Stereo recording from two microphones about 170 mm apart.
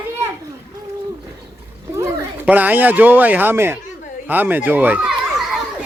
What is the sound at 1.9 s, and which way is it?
Speech, 15° right (ahead or behind).